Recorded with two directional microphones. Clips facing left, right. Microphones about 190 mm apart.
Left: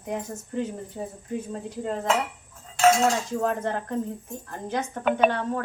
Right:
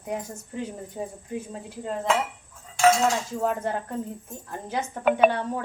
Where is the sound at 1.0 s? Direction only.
20° right (ahead or behind).